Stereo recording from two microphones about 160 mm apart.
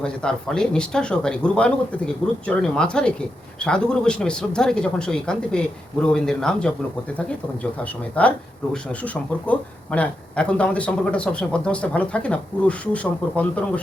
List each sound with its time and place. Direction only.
0.0 s a man's voice: 5° left (ahead or behind)
8.2 s a man's voice: 10° left (ahead or behind)